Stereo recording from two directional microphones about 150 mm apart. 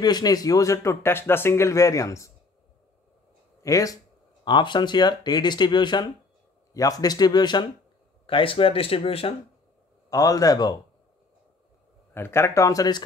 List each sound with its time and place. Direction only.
0.0 s speech: 25° left (ahead or behind)
3.6 s speech: 20° left (ahead or behind); by 9.3 s 40° left (ahead or behind)
10.0 s speech: 25° left (ahead or behind)
12.1 s speech: 15° left (ahead or behind)